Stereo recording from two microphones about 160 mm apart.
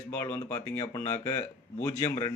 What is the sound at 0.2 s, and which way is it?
A man's voice, 20° left (ahead or behind).